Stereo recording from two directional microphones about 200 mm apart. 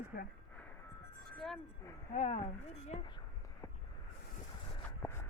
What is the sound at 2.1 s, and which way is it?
Speech, 35° left (ahead or behind).